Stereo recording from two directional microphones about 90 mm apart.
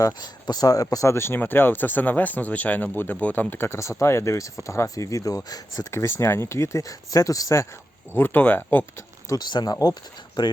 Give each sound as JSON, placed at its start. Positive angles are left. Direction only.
{"t": 0.0, "sound": "speech", "side_deg": 50}
{"t": 5.9, "sound": "speech", "side_deg": 30}
{"t": 8.1, "sound": "speech", "side_deg": 20}
{"t": 9.3, "sound": "speech", "side_deg": 50}